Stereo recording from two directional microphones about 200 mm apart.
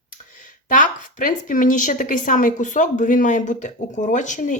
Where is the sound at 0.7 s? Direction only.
40° left (ahead or behind).